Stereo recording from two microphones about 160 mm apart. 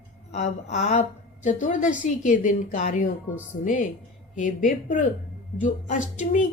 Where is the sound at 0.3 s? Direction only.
45° left (ahead or behind).